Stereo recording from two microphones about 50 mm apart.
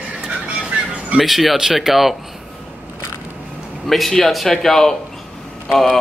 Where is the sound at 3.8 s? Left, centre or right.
Centre.